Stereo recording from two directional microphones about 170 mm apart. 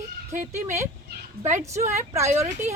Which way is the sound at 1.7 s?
40° right (ahead or behind).